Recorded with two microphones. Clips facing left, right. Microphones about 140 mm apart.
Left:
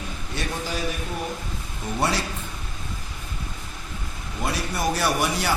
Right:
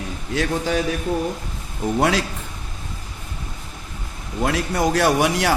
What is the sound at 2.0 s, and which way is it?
Speech, 90° right.